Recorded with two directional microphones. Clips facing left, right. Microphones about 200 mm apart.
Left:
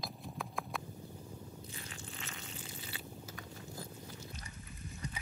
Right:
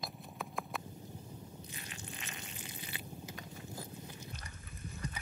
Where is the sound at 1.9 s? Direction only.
20° right (ahead or behind).